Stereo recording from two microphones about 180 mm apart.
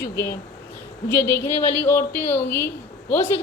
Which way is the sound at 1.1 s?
10° left (ahead or behind).